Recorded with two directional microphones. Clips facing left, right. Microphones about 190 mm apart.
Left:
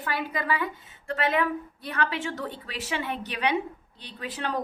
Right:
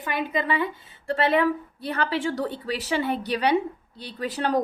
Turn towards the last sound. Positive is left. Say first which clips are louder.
# right 6 dB
turn(degrees=-40)  # may be behind; listen again after turning